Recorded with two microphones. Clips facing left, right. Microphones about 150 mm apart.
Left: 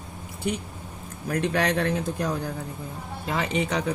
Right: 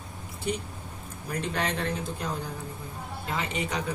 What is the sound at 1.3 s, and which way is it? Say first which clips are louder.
Speech: left 6 dB; 70° left (ahead or behind).